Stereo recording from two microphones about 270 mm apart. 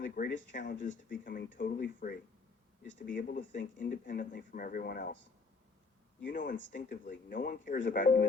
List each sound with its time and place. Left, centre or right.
0.2 s speech: left
6.1 s speech: left